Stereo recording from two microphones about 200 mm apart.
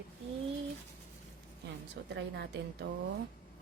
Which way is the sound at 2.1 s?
60° right (ahead or behind).